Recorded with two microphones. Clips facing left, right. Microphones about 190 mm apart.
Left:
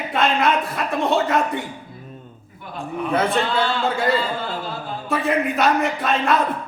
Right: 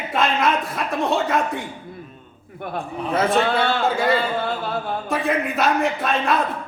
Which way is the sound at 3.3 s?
60° right (ahead or behind).